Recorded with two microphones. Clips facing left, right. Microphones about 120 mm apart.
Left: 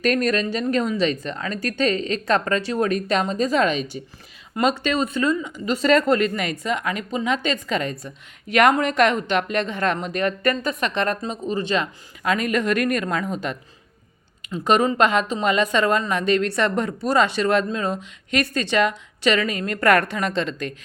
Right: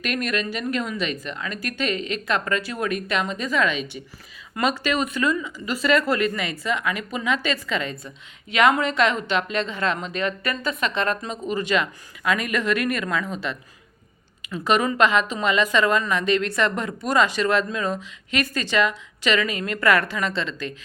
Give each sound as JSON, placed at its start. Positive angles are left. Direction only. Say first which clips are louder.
{"t": 0.0, "sound": "speech", "louder": "left 5 dB", "side_deg": 35}
{"t": 4.6, "sound": "speech", "louder": "left 3 dB", "side_deg": 25}
{"t": 4.9, "sound": "a woman's voice", "louder": "left 2 dB", "side_deg": 35}
{"t": 14.6, "sound": "a woman's voice", "louder": "left 2 dB", "side_deg": 40}